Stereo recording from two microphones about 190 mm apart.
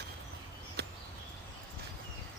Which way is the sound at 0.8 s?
60° right (ahead or behind).